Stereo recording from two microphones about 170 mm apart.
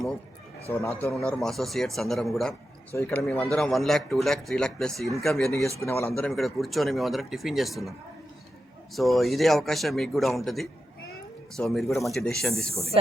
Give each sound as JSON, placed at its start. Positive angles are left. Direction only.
{"t": 0.7, "sound": "speech", "side_deg": 15}
{"t": 1.3, "sound": "speech", "side_deg": 0}
{"t": 2.9, "sound": "speech", "side_deg": 15}
{"t": 5.8, "sound": "speech", "side_deg": 15}
{"t": 6.2, "sound": "speech", "side_deg": 0}
{"t": 9.0, "sound": "speech", "side_deg": 0}
{"t": 12.7, "sound": "speech", "side_deg": -35}